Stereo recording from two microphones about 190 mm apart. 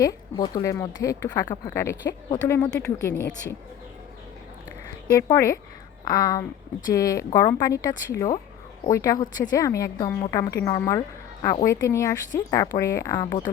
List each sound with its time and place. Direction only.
0.0 s a woman's voice: 20° left (ahead or behind)
5.3 s a woman's voice: 15° left (ahead or behind)